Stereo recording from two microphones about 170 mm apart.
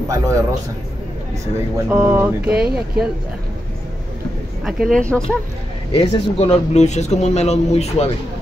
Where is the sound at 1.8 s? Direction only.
10° right (ahead or behind).